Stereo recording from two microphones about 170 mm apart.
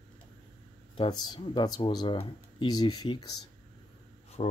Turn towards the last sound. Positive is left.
turn(degrees=40)  # may be behind; listen again after turning